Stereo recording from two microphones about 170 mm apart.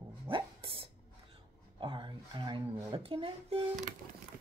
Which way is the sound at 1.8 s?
30° right (ahead or behind).